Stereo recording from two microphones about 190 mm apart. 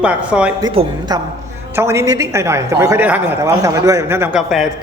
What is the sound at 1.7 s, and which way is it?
A woman's voice, 15° right (ahead or behind).